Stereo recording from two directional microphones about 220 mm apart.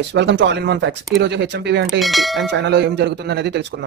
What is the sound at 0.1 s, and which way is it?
Speech, 55° right (ahead or behind).